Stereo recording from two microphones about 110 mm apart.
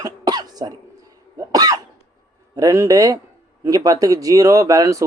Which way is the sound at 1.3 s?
35° right (ahead or behind).